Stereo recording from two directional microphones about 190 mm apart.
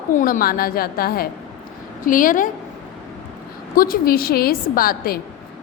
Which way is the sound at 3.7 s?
50° left (ahead or behind).